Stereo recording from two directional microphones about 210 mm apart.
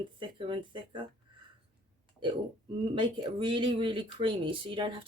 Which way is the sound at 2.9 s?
25° right (ahead or behind).